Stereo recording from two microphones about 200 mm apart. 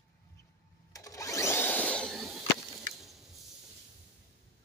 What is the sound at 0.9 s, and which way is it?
Vacuum cleaner, 15° left (ahead or behind).